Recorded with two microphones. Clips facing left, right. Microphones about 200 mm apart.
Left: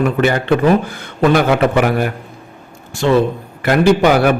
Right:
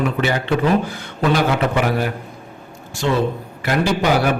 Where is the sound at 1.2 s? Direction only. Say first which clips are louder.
Left 5 dB; 55° left (ahead or behind).